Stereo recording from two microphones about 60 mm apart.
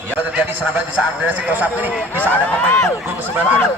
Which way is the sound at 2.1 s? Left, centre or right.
Left.